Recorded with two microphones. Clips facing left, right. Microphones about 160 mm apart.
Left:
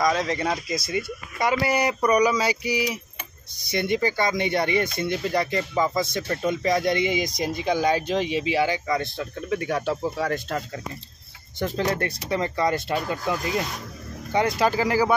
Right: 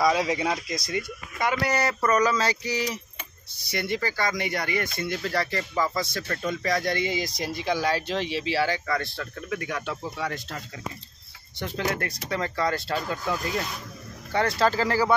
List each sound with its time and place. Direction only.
0.0 s speech: 10° right (ahead or behind); by 10.6 s 45° left (ahead or behind)
11.6 s speech: 35° left (ahead or behind); by 15.1 s 15° left (ahead or behind)